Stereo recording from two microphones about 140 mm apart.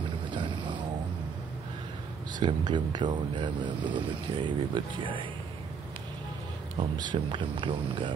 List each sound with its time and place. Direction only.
0.3 s boat: 35° right (ahead or behind)
2.4 s speech: 35° right (ahead or behind)
7.0 s speech: 35° right (ahead or behind)